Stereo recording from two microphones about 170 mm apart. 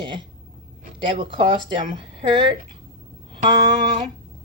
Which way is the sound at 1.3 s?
30° right (ahead or behind).